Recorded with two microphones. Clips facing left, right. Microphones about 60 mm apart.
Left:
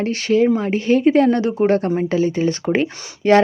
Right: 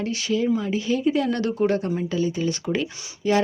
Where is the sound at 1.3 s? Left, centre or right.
Left.